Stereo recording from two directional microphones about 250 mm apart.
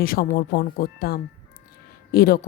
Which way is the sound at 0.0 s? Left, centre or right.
Left.